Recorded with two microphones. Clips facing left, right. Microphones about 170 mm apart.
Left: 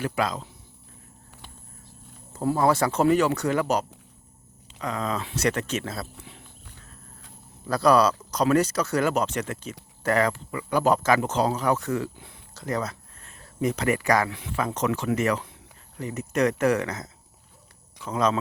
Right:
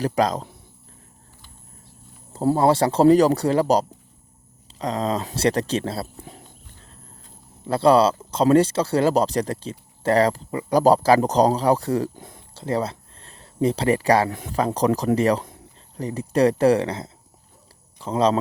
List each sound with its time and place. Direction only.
0.0 s speech: 40° right (ahead or behind)
2.3 s speech: 30° right (ahead or behind)
6.2 s walk: 40° right (ahead or behind)
7.6 s speech: 25° right (ahead or behind); by 12.4 s 45° right (ahead or behind)
12.5 s speech: 30° right (ahead or behind)